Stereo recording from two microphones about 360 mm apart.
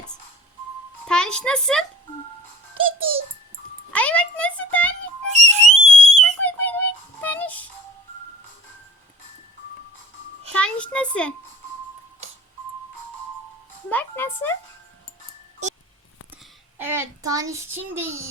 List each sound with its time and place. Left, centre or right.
1.0 s speech: centre
2.7 s a child's voice: centre
3.9 s a sound: centre
5.3 s whistle: centre
6.4 s music: centre
10.5 s a sound: centre
13.9 s music: centre
16.7 s child singing: centre